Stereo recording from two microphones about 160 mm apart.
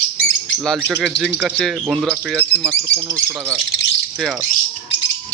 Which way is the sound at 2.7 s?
20° right (ahead or behind).